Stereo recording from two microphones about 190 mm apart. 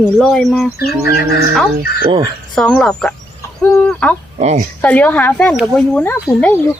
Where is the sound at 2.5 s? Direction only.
5° left (ahead or behind).